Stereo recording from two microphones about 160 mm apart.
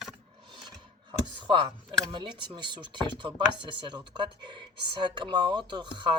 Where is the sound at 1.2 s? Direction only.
30° right (ahead or behind).